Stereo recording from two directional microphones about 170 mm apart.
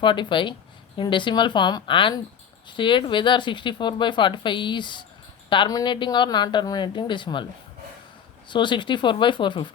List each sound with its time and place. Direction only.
0.0 s speech: 30° left (ahead or behind)
8.4 s speech: 30° left (ahead or behind)